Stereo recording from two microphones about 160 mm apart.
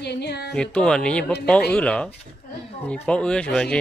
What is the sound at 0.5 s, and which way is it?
Speech, 5° left (ahead or behind).